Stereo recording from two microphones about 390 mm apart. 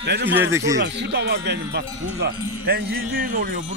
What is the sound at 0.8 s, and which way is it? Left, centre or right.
Speech, right.